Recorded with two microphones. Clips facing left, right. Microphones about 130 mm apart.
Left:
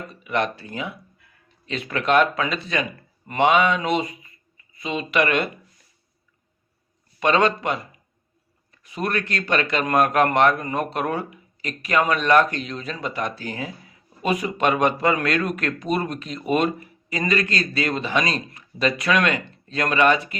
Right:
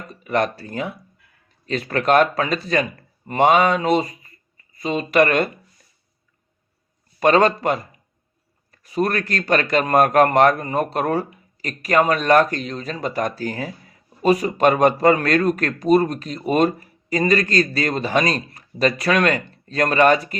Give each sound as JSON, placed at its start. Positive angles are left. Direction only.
{"t": 0.1, "sound": "speech", "side_deg": -40}
{"t": 7.2, "sound": "speech", "side_deg": -40}